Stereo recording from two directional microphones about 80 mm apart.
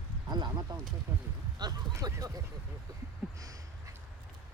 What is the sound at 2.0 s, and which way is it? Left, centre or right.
Speech, right.